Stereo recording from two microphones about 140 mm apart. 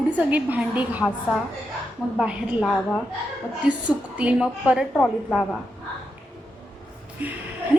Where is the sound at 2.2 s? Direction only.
5° right (ahead or behind).